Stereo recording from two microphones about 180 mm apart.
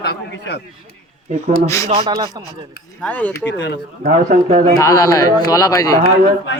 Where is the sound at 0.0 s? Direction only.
65° left (ahead or behind).